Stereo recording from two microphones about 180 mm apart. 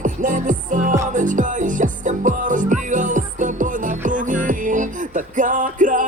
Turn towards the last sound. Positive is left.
turn(degrees=-45)  # may be behind; listen again after turning